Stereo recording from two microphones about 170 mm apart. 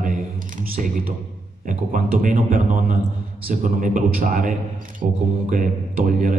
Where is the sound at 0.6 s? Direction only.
50° right (ahead or behind).